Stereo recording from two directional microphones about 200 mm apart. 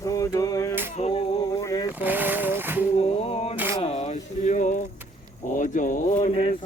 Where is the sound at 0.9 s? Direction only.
35° left (ahead or behind).